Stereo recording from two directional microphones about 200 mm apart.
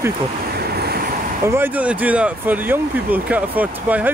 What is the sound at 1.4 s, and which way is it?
Speech, 10° right (ahead or behind).